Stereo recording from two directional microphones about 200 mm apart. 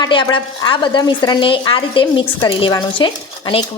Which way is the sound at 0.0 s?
20° left (ahead or behind).